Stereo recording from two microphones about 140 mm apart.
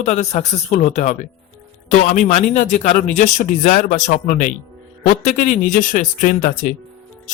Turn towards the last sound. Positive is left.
turn(degrees=80)